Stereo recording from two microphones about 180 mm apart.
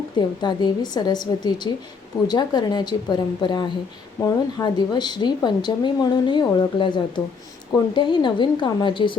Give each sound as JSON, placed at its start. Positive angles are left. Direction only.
{"t": 0.2, "sound": "speech", "side_deg": 25}